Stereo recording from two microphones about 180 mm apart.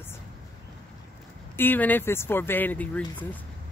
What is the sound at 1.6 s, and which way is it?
Speech, 10° left (ahead or behind).